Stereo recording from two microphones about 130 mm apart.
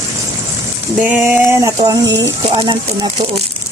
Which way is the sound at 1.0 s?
10° right (ahead or behind).